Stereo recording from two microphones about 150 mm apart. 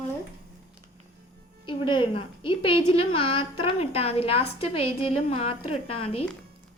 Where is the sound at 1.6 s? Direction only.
35° left (ahead or behind).